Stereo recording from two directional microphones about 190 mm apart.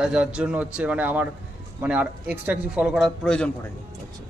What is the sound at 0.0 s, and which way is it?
Speech, 5° right (ahead or behind).